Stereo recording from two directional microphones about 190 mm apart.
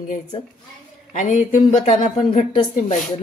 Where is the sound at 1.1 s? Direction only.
40° left (ahead or behind).